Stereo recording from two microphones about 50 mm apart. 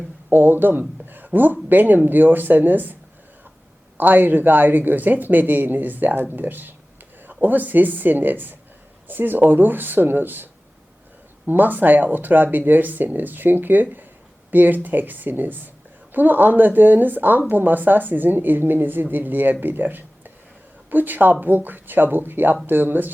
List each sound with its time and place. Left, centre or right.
0.3 s a woman's voice: right